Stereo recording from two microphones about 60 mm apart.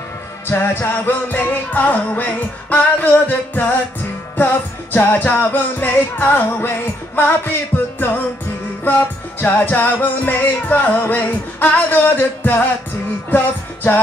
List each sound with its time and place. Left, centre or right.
0.5 s music: left